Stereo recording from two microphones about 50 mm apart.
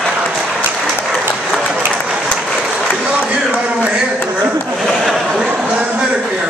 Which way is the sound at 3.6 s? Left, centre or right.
Right.